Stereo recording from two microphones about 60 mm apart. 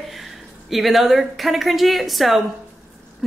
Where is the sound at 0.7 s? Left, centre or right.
Centre.